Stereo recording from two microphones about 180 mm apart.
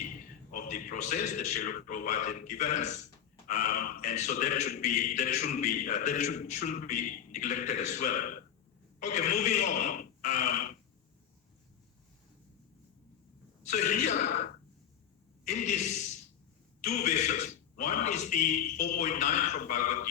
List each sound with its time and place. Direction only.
0.5 s a man's voice: 50° left (ahead or behind)
13.7 s a man's voice: 40° left (ahead or behind)
15.4 s a man's voice: 40° left (ahead or behind)